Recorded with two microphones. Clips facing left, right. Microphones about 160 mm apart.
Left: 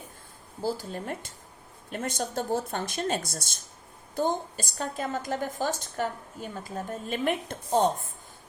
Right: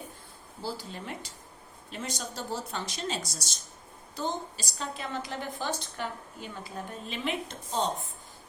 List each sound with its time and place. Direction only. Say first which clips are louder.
0.6 s a woman's voice: left 6 dB; 45° left (ahead or behind)